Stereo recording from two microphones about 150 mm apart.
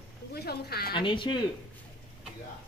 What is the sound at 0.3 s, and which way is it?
Speech, 90° left.